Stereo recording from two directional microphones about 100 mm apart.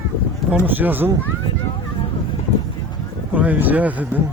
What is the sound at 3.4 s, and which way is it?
Speech, 15° right (ahead or behind).